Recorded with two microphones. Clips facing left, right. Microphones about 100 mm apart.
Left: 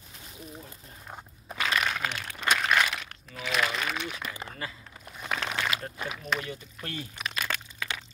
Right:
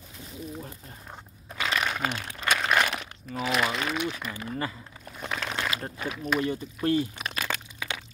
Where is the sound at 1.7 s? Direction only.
5° right (ahead or behind).